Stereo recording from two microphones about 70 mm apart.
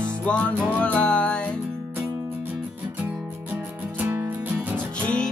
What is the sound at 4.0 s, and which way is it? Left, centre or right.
Music, right.